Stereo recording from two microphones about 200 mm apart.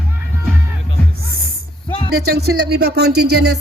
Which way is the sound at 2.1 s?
50° right (ahead or behind).